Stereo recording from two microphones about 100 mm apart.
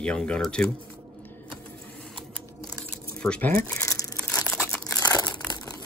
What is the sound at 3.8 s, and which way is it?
Crumpling, 30° left (ahead or behind).